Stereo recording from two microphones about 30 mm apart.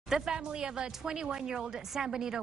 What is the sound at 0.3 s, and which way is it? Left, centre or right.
A woman's voice, right.